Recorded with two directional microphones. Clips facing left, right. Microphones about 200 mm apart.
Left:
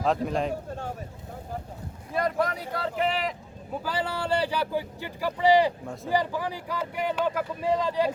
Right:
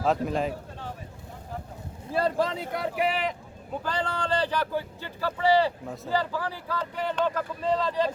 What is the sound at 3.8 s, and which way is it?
Speech, 10° left (ahead or behind).